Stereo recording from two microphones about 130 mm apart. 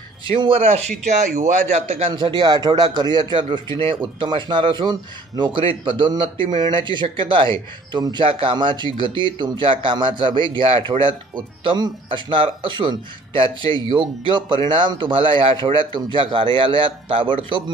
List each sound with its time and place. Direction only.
0.2 s speech: 45° right (ahead or behind)